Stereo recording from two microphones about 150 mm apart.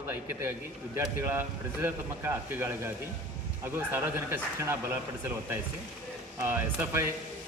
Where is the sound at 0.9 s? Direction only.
15° right (ahead or behind).